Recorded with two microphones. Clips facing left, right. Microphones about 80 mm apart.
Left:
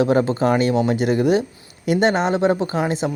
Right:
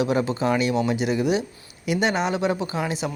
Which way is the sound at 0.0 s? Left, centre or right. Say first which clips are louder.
Left 5 dB; left.